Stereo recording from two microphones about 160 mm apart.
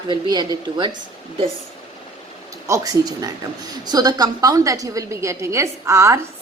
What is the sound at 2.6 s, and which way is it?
A woman's voice, 20° right (ahead or behind).